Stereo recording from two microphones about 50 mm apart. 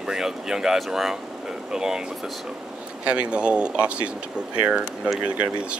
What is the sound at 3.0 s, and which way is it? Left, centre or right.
Speech, right.